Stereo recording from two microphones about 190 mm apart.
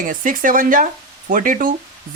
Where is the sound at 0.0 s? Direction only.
45° right (ahead or behind).